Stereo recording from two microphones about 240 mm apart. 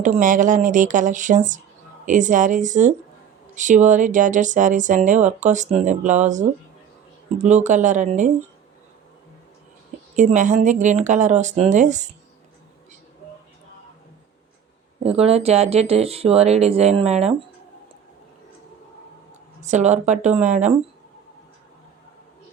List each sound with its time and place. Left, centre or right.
0.0 s speech: right
10.2 s speech: right
15.0 s speech: right
19.6 s speech: right